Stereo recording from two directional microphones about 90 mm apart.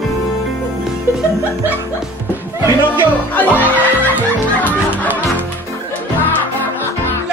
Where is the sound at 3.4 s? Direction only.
20° left (ahead or behind).